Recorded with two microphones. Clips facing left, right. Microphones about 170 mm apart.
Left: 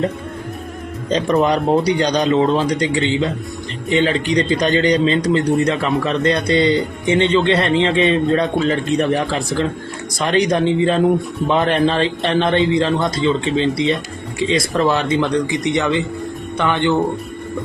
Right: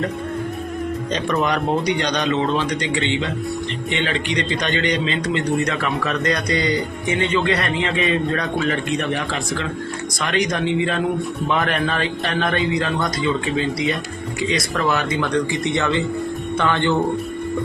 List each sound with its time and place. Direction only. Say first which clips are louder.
1.1 s a man's voice: left 6 dB; 35° left (ahead or behind)
6.0 s a man's voice: left 4 dB; 25° left (ahead or behind)